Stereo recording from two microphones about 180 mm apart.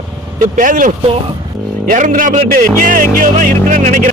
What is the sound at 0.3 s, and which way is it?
A man's voice, 45° right (ahead or behind).